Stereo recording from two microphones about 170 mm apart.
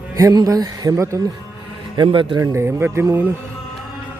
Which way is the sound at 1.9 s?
30° right (ahead or behind).